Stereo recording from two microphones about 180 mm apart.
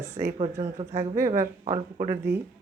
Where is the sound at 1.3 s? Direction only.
20° right (ahead or behind).